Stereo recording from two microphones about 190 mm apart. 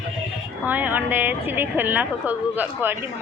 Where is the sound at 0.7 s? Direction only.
10° right (ahead or behind).